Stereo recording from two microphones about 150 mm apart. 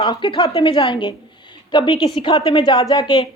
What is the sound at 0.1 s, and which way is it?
A woman's voice, 30° left (ahead or behind).